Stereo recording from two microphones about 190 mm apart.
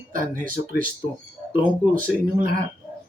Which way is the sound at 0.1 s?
45° right (ahead or behind).